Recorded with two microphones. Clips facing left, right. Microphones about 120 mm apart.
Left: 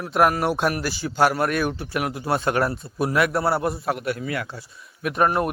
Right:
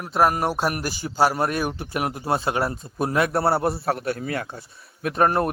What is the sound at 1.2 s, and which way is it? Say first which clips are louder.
A man's voice: left 1 dB; 30° right (ahead or behind).